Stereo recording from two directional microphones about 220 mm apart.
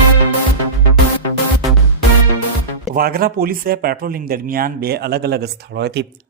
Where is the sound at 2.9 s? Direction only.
45° right (ahead or behind).